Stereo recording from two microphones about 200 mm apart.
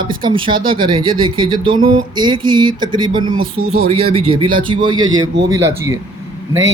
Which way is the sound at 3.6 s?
90° right.